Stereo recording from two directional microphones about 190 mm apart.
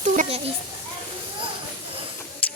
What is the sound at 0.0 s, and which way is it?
Children playing, 35° right (ahead or behind).